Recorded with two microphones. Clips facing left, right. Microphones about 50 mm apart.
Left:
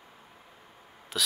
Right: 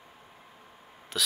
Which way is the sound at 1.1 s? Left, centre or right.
Centre.